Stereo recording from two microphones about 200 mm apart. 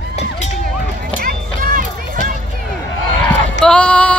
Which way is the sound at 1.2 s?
45° right (ahead or behind).